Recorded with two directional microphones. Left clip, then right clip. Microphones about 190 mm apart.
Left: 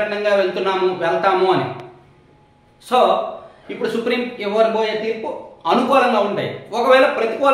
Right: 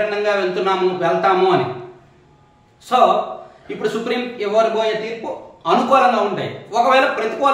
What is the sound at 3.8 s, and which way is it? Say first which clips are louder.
Speech: left 1 dB; 20° left (ahead or behind).